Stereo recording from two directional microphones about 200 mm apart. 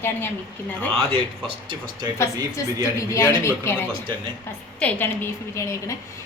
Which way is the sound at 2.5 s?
15° left (ahead or behind).